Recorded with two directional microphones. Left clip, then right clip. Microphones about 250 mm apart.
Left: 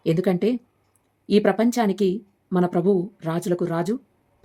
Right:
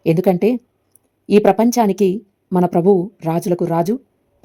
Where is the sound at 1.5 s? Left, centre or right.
Centre.